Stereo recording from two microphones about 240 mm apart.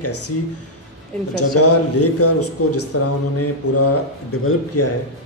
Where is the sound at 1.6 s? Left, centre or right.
Left.